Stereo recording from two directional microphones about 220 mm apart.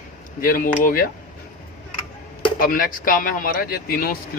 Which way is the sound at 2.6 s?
40° left (ahead or behind).